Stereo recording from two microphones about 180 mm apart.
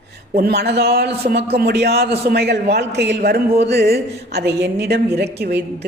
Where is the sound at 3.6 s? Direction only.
65° right (ahead or behind).